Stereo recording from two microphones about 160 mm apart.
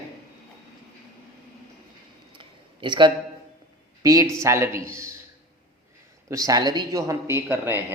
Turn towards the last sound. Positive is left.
turn(degrees=-15)  # may be behind; listen again after turning